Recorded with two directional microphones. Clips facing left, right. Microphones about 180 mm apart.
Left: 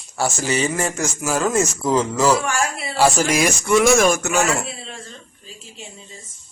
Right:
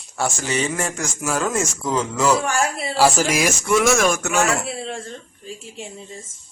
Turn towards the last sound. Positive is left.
turn(degrees=-60)  # may be behind; listen again after turning